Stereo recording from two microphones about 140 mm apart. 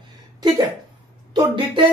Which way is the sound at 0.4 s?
30° right (ahead or behind).